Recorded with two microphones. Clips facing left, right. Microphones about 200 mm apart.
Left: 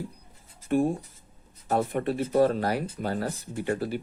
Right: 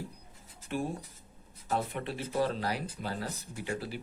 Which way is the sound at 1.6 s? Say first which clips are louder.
Left 7 dB; 50° left (ahead or behind).